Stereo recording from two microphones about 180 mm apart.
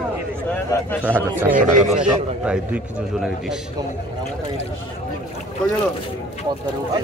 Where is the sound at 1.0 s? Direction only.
10° right (ahead or behind).